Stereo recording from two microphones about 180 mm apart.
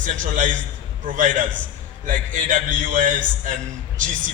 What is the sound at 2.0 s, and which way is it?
A man's voice, 45° right (ahead or behind).